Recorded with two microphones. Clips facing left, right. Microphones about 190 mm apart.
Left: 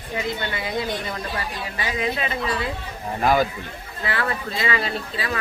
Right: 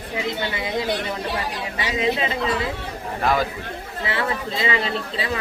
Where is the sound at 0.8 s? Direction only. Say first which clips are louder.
Right 3 dB; 70° right (ahead or behind).